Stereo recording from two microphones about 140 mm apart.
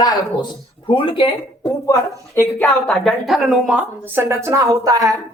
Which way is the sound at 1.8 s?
20° left (ahead or behind).